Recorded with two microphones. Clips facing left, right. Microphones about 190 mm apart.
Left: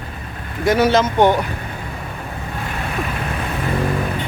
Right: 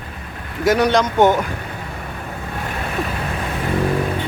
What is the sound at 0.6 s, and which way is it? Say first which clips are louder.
Speech: left 1 dB; centre (ahead or behind).